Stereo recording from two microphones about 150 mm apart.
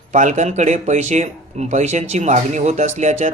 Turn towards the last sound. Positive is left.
turn(degrees=-50)  # may be behind; listen again after turning